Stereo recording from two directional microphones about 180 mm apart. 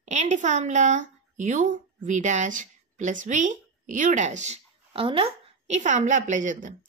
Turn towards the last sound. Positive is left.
turn(degrees=-45)  # may be behind; listen again after turning